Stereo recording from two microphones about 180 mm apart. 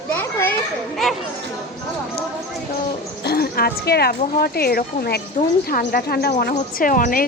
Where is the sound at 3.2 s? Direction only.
60° left (ahead or behind).